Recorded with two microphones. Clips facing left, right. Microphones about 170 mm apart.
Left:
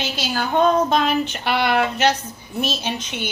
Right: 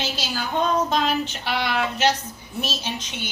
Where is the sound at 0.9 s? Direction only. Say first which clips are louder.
Left 3 dB; 60° left (ahead or behind).